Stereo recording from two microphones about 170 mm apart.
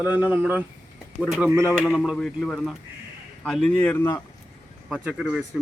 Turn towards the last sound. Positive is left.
turn(degrees=0)  # may be behind; listen again after turning